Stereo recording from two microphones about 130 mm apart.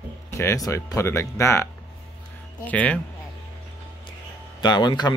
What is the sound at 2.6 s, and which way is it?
Speech, 10° left (ahead or behind).